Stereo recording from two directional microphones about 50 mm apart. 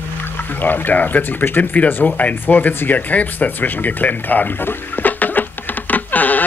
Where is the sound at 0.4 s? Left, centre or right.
Left.